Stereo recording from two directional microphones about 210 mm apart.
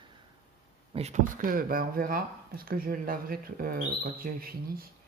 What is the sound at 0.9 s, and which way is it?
Speech, 35° right (ahead or behind).